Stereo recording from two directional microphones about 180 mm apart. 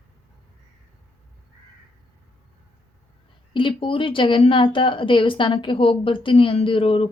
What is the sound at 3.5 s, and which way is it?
Speech, 30° left (ahead or behind).